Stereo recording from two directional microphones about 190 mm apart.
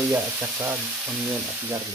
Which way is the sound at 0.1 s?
15° right (ahead or behind).